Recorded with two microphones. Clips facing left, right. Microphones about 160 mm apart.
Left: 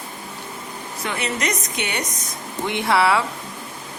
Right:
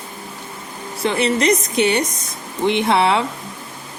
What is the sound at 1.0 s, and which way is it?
A woman's voice, 30° right (ahead or behind).